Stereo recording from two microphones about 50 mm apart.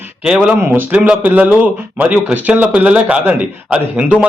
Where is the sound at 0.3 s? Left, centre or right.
Centre.